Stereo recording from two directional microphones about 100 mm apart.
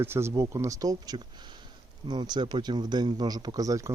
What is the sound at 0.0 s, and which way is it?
Speech, 25° right (ahead or behind).